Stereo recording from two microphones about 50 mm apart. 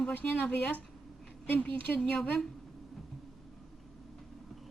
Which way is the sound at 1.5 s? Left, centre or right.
Left.